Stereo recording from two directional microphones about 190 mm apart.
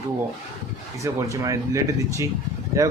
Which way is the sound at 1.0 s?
15° right (ahead or behind).